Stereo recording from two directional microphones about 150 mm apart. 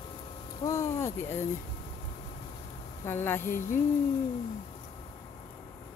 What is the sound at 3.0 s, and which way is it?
Speech, 15° left (ahead or behind).